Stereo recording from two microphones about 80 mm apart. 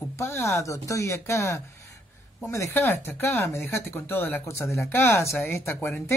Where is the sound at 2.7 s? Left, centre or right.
Left.